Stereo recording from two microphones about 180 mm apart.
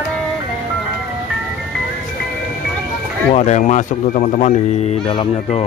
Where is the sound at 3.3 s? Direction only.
40° left (ahead or behind).